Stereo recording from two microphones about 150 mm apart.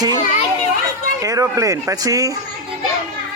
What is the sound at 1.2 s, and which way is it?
Speech, 20° right (ahead or behind).